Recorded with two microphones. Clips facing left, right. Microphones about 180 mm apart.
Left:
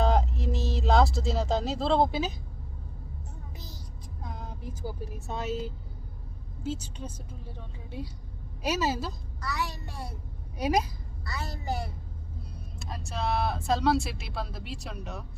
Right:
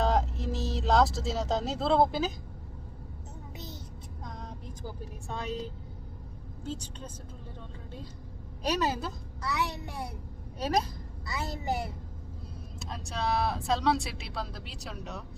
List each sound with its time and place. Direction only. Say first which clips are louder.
0.0 s a sound: left 1 dB; centre (ahead or behind)
4.2 s vehicle: left 2 dB; 5° left (ahead or behind)
6.6 s a woman's voice: left 4 dB; 5° left (ahead or behind)
9.4 s a child's voice: right 2 dB; 20° right (ahead or behind)
10.6 s a woman's voice: left 2 dB; 10° left (ahead or behind)
11.3 s a child's voice: right 2 dB; 20° right (ahead or behind)
13.1 s speech: even; centre (ahead or behind)